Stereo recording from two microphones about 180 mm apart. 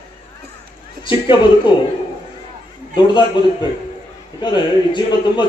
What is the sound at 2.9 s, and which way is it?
Speech, 25° left (ahead or behind).